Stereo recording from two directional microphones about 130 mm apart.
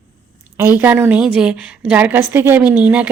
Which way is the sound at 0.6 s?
20° right (ahead or behind).